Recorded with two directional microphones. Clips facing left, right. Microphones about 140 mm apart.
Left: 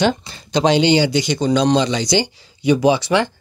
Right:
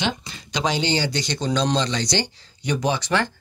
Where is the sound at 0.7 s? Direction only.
15° left (ahead or behind).